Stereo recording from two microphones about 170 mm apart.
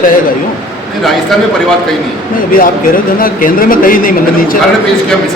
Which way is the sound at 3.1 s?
55° left (ahead or behind).